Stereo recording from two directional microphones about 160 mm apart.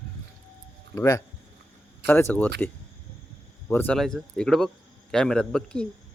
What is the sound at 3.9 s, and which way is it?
Speech, centre (ahead or behind).